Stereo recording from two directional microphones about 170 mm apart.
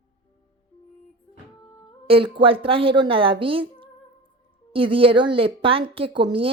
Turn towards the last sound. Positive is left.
turn(degrees=-30)  # may be behind; listen again after turning